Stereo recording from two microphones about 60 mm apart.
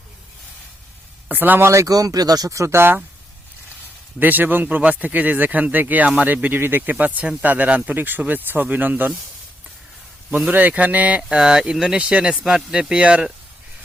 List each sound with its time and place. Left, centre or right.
1.3 s speech: right
1.6 s speech: right
4.2 s speech: right
10.5 s speech: right
11.2 s speech: centre